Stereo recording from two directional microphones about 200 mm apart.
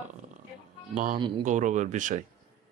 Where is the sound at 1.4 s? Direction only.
40° right (ahead or behind).